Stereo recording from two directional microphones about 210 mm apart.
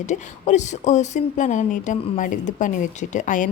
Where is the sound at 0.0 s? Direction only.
35° left (ahead or behind).